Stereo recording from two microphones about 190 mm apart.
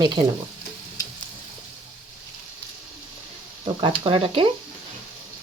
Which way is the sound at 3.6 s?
25° right (ahead or behind).